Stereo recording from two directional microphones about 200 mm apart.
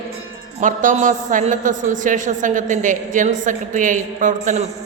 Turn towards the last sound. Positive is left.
turn(degrees=-35)  # may be behind; listen again after turning